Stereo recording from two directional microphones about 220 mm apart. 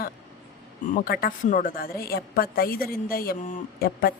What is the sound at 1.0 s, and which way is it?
A woman's voice, 40° left (ahead or behind).